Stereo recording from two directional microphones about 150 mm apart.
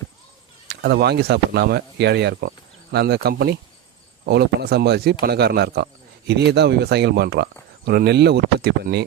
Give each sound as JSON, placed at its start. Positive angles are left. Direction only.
{"t": 0.7, "sound": "speech", "side_deg": -90}